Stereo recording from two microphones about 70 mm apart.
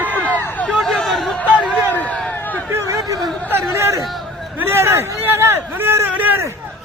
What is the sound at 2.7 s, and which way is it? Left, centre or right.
Chatter, right.